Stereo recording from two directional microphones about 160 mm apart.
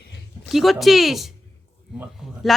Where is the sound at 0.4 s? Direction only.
Centre (ahead or behind).